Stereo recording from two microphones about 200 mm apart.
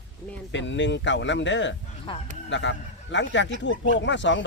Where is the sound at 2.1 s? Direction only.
25° left (ahead or behind).